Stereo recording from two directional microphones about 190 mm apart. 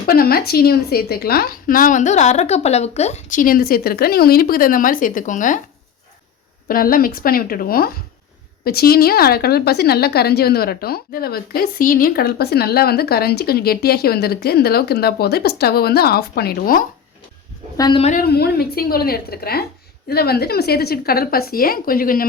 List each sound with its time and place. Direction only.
0.1 s a woman's voice: 50° left (ahead or behind)
6.7 s a woman's voice: 50° left (ahead or behind)
17.7 s a woman's voice: 20° left (ahead or behind)
18.0 s a woman's voice: 40° left (ahead or behind)
18.3 s a woman's voice: 55° left (ahead or behind)